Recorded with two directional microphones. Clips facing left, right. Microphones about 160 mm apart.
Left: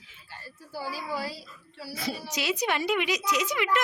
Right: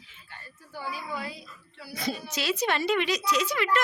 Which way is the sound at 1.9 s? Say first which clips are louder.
Right 1 dB; 5° left (ahead or behind).